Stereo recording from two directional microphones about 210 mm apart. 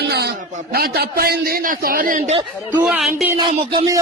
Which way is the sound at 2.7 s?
5° right (ahead or behind).